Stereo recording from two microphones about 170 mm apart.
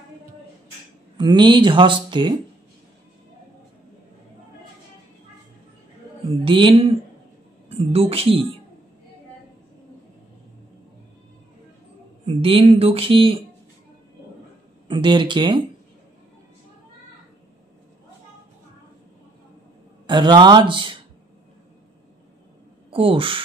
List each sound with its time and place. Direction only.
1.1 s speech: 25° right (ahead or behind)
6.4 s speech: 30° right (ahead or behind)
12.3 s speech: 35° right (ahead or behind)
14.9 s speech: 25° right (ahead or behind)
20.1 s speech: 25° right (ahead or behind)
22.8 s speech: 30° right (ahead or behind)